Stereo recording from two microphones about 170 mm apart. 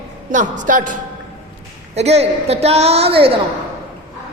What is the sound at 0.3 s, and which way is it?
Speech, 50° right (ahead or behind).